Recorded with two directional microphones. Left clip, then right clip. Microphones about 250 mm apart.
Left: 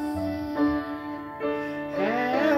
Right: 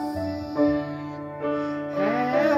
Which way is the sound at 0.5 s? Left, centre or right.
Left.